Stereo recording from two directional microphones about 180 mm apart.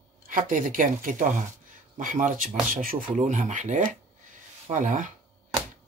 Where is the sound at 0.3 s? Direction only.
50° right (ahead or behind).